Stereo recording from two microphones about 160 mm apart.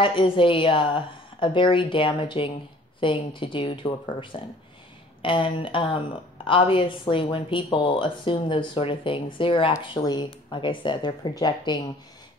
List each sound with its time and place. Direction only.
0.0 s speech: 30° left (ahead or behind)